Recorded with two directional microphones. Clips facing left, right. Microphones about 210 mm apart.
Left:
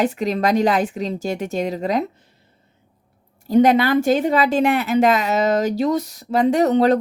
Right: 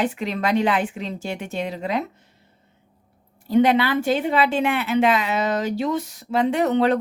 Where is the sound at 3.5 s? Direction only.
45° left (ahead or behind).